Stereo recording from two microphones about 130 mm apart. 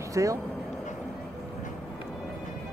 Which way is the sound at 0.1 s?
25° right (ahead or behind).